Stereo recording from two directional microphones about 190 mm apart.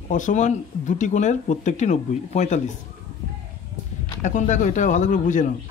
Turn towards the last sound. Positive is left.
turn(degrees=40)  # may be behind; listen again after turning